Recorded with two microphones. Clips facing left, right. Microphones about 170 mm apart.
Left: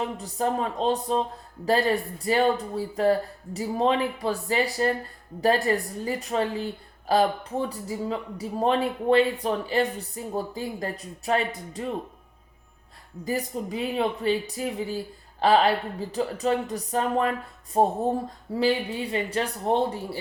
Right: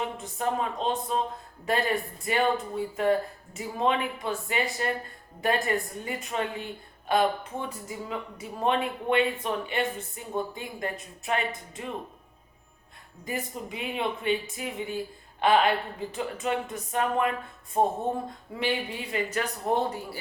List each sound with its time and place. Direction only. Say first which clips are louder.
0.2 s speech: left 3 dB; 35° left (ahead or behind)
13.2 s speech: left 5 dB; 35° left (ahead or behind)